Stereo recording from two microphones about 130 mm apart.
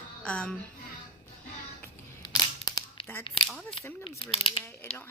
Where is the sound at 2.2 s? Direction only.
30° left (ahead or behind).